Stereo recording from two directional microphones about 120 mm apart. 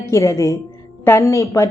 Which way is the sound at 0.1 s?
25° left (ahead or behind).